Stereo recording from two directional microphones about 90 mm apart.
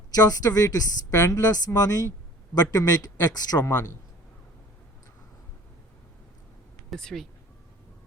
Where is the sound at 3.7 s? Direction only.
30° left (ahead or behind).